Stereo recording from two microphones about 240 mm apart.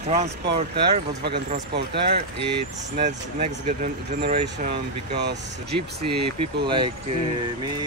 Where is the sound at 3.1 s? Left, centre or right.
Right.